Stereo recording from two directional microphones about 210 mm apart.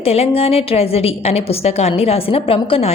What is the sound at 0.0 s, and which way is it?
A woman's voice, 30° left (ahead or behind).